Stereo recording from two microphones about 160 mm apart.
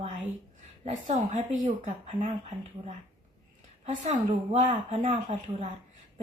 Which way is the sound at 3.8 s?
50° right (ahead or behind).